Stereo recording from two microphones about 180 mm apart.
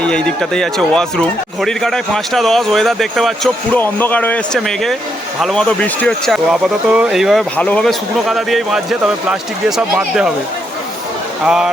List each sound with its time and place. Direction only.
0.0 s speech: 5° left (ahead or behind)
11.4 s speech: 5° right (ahead or behind)